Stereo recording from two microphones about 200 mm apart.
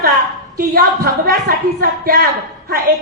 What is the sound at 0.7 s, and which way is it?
A woman's voice, 50° right (ahead or behind).